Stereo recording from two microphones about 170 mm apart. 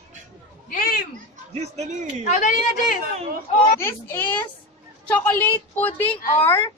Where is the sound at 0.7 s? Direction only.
60° left (ahead or behind).